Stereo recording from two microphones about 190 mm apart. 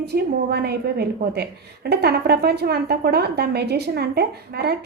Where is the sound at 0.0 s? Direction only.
60° right (ahead or behind).